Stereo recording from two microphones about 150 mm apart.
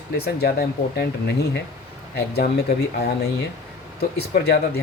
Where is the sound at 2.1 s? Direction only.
90° left.